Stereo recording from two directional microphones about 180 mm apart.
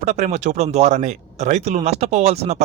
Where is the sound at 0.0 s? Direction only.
40° right (ahead or behind).